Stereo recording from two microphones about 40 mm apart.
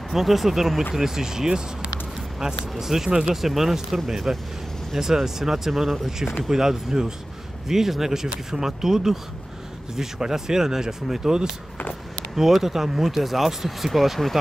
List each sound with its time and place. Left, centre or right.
0.1 s speech: centre
3.3 s speech: centre